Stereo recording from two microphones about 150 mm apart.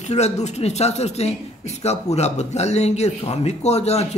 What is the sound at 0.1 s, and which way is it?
Speech, 50° left (ahead or behind).